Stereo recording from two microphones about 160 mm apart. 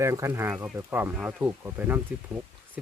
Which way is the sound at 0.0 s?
20° right (ahead or behind).